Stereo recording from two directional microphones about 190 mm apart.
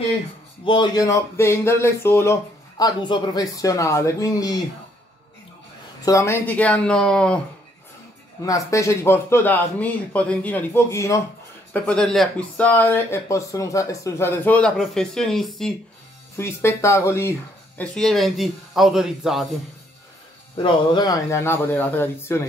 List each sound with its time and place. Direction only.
0.7 s speech: 25° left (ahead or behind)
6.0 s speech: 15° left (ahead or behind)
8.5 s speech: 15° left (ahead or behind); by 15.7 s centre (ahead or behind)
16.3 s speech: 15° left (ahead or behind)
17.9 s a man's voice: centre (ahead or behind)
20.5 s speech: 25° left (ahead or behind)